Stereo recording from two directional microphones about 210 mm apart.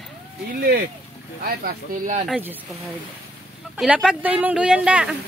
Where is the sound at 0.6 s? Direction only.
50° right (ahead or behind).